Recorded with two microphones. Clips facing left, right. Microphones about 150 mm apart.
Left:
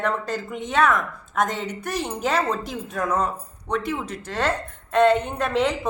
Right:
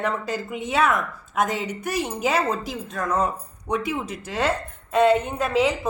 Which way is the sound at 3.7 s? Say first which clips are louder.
Even; 10° right (ahead or behind).